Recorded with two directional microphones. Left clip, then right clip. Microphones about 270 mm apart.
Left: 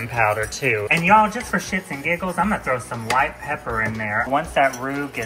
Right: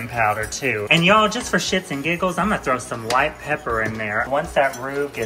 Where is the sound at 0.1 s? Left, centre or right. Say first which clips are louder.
Even; centre.